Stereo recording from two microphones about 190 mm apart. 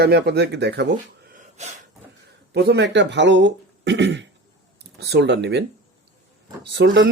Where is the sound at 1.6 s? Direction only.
35° right (ahead or behind).